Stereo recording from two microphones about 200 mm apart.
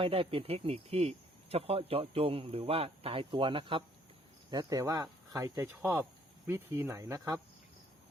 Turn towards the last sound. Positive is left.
turn(degrees=-15)  # may be behind; listen again after turning